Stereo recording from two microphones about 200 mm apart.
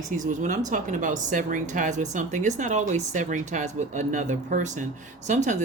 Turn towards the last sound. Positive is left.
turn(degrees=-35)  # may be behind; listen again after turning